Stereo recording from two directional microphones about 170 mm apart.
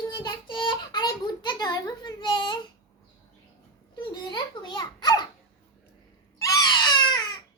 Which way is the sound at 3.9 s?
25° left (ahead or behind).